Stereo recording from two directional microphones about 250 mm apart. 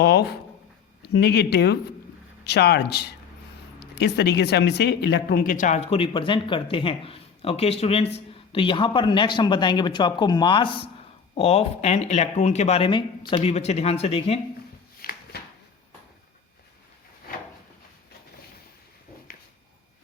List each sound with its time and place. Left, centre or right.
0.0 s speech: left
14.9 s shuffling cards: left